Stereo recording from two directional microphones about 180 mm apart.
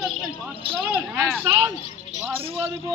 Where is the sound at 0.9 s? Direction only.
5° right (ahead or behind).